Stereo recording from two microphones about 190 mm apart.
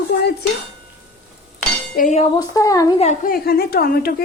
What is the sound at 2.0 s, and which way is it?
Dishes, 40° left (ahead or behind).